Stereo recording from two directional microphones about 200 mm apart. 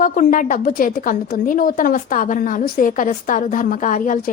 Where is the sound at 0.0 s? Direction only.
45° left (ahead or behind).